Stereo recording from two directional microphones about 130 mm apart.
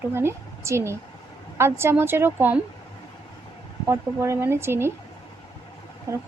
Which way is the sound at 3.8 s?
20° right (ahead or behind).